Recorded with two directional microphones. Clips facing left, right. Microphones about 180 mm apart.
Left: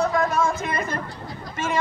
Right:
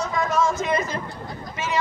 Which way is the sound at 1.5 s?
50° left (ahead or behind).